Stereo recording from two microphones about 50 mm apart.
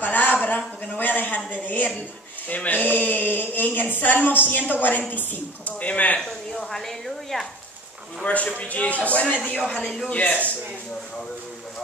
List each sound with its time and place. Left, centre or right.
0.0 s a sound: left
0.9 s a woman's voice: left
6.5 s a woman's voice: centre
8.2 s a woman's voice: left